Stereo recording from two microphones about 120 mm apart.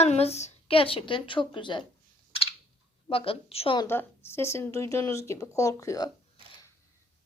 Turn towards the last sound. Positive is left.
turn(degrees=30)  # may be behind; listen again after turning